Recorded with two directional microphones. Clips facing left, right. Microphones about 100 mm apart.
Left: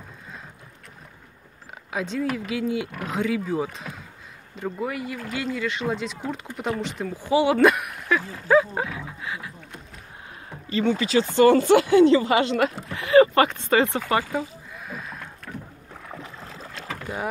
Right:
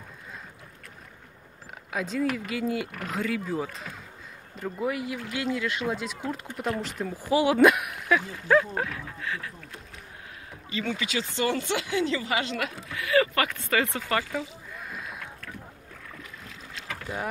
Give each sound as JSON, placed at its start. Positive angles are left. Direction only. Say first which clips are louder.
{"t": 1.9, "sound": "speech", "louder": "left 1 dB", "side_deg": 0}
{"t": 4.7, "sound": "speech", "louder": "right 2 dB", "side_deg": 0}
{"t": 10.7, "sound": "speech", "louder": "left 9 dB", "side_deg": 35}
{"t": 14.7, "sound": "rowboat", "louder": "left 2 dB", "side_deg": 0}
{"t": 15.4, "sound": "boat", "louder": "left 4 dB", "side_deg": 30}